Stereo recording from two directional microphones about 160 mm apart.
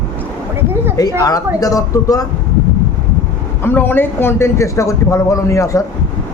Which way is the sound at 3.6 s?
15° left (ahead or behind).